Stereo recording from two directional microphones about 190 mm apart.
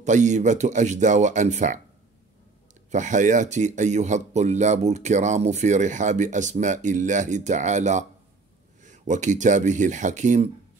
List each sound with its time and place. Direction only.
0.0 s speech: 40° right (ahead or behind)
2.9 s speech: 40° right (ahead or behind)